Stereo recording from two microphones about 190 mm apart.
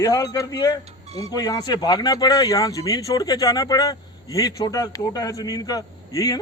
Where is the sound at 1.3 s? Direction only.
20° left (ahead or behind).